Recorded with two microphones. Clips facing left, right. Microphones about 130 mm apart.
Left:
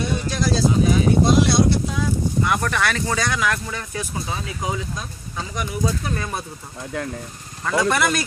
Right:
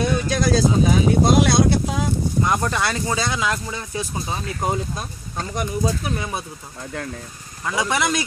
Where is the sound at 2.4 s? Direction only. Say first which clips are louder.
Even; 20° right (ahead or behind).